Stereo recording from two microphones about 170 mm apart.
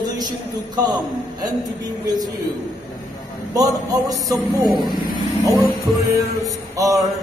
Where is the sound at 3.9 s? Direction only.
20° right (ahead or behind).